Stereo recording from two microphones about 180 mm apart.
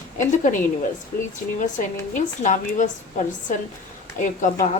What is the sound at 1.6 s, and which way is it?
A woman's voice, 45° left (ahead or behind).